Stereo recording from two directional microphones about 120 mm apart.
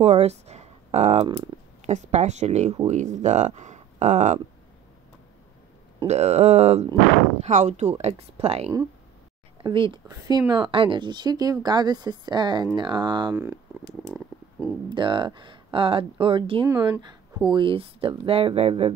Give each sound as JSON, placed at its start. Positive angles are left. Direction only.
{"t": 0.0, "sound": "a sound", "side_deg": -60}
{"t": 1.2, "sound": "speech", "side_deg": -40}
{"t": 1.9, "sound": "speech", "side_deg": -75}
{"t": 6.0, "sound": "speech", "side_deg": -65}
{"t": 9.6, "sound": "speech", "side_deg": -40}
{"t": 10.0, "sound": "speech", "side_deg": -30}
{"t": 10.5, "sound": "speech", "side_deg": -45}
{"t": 13.3, "sound": "speech", "side_deg": -25}
{"t": 14.9, "sound": "speech", "side_deg": -40}